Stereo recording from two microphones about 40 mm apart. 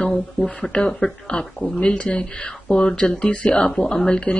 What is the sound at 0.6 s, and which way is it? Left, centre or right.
A woman's voice, left.